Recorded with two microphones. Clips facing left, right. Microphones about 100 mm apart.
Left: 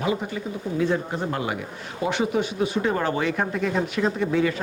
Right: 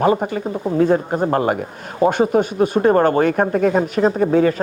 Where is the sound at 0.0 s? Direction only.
45° right (ahead or behind).